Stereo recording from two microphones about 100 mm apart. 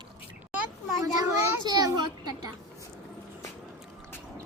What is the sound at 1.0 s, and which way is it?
A child's voice, 40° right (ahead or behind).